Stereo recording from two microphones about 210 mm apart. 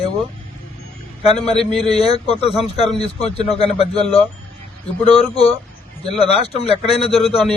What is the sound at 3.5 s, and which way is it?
Speech, 30° left (ahead or behind).